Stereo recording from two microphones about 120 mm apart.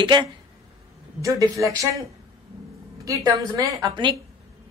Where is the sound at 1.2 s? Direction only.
25° right (ahead or behind).